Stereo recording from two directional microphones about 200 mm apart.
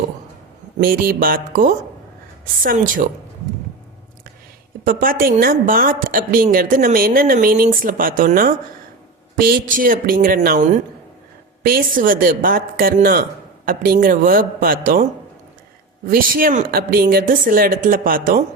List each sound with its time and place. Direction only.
0.8 s a woman's voice: 45° right (ahead or behind)
4.8 s a woman's voice: 45° right (ahead or behind)
16.0 s a woman's voice: 45° right (ahead or behind)